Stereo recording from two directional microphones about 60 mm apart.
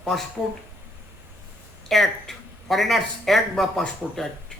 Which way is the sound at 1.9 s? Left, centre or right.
Centre.